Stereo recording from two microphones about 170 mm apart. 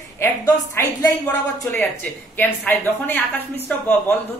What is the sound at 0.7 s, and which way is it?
A woman's voice, 20° left (ahead or behind).